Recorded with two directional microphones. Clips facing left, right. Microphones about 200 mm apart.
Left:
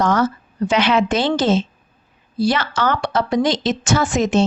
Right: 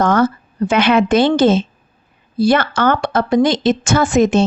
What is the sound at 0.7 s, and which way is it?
A woman's voice, 55° right (ahead or behind).